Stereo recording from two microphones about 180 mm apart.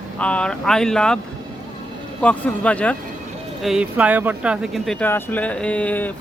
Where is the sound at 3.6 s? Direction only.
5° right (ahead or behind).